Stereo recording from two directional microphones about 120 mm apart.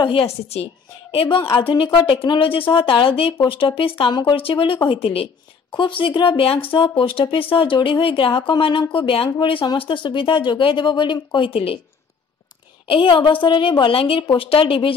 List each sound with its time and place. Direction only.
0.0 s speech: 50° left (ahead or behind)
12.8 s speech: 45° left (ahead or behind)